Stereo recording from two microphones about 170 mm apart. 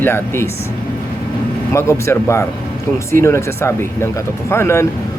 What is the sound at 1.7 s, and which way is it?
Speech, 15° left (ahead or behind).